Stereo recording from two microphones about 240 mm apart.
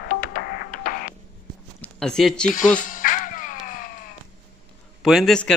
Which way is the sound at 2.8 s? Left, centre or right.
Left.